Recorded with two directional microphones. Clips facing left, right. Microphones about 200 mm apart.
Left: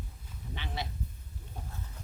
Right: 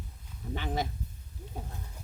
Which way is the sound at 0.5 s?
45° right (ahead or behind).